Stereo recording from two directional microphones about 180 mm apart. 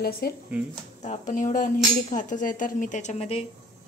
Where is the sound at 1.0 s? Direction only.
45° left (ahead or behind).